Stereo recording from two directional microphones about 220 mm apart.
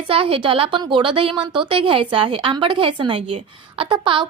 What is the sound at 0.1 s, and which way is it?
Speech, 25° right (ahead or behind).